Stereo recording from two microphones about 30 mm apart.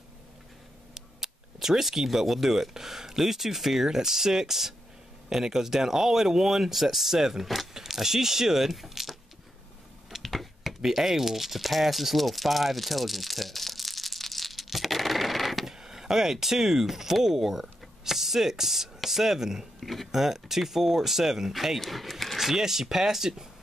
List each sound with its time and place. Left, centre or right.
0.9 s speech: centre
10.2 s computer keyboard: centre
10.8 s rattle: centre
15.8 s speech: centre
19.8 s speech: centre
20.1 s speech: centre
21.8 s a sound: centre
22.4 s speech: centre